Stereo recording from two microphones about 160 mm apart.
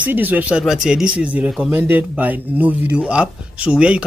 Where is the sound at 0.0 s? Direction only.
10° right (ahead or behind).